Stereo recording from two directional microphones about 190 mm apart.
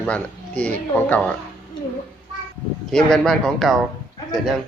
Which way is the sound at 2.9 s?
5° left (ahead or behind).